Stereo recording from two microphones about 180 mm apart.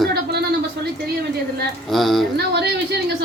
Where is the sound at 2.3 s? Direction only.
65° right (ahead or behind).